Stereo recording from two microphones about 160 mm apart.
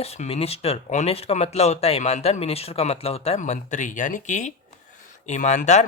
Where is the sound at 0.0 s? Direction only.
40° left (ahead or behind).